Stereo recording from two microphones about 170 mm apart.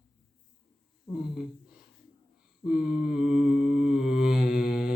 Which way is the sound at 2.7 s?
5° right (ahead or behind).